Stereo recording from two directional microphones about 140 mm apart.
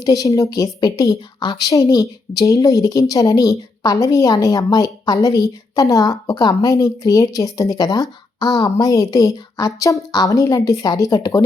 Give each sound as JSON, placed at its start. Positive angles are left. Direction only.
{"t": 0.0, "sound": "a woman's voice", "side_deg": 25}